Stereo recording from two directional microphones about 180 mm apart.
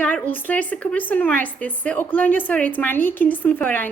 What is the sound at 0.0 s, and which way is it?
A woman's voice, 10° left (ahead or behind).